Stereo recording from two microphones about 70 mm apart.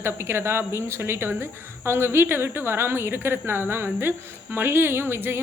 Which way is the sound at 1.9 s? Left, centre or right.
Right.